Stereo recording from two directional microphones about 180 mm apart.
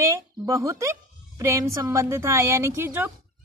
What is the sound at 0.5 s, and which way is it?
A woman's voice, 15° right (ahead or behind).